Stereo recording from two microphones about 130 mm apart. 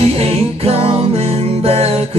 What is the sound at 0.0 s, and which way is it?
Music, 50° right (ahead or behind).